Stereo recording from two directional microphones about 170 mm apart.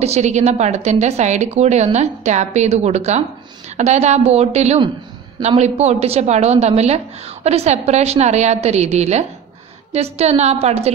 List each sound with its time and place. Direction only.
0.0 s a woman's voice: 40° right (ahead or behind)